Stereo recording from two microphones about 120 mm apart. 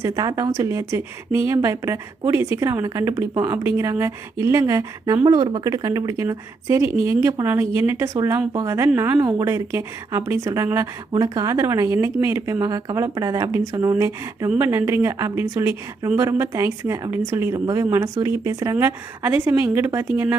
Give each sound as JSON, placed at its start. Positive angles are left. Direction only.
{"t": 0.0, "sound": "speech", "side_deg": -30}